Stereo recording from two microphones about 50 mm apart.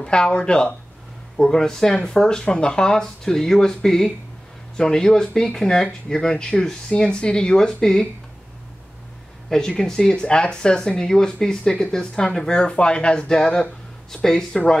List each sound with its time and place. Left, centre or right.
0.0 s speech: centre
9.5 s speech: centre